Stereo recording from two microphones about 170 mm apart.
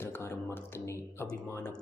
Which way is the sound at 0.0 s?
15° left (ahead or behind).